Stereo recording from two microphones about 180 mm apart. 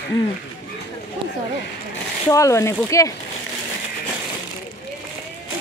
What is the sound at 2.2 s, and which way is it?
Speech, 15° left (ahead or behind).